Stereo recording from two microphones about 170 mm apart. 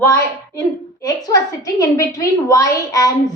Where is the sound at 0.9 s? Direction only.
20° left (ahead or behind).